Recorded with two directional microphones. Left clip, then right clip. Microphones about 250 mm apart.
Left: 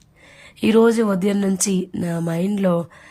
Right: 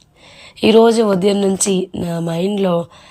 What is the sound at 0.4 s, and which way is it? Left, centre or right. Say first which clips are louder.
A woman's voice: right 5 dB; centre.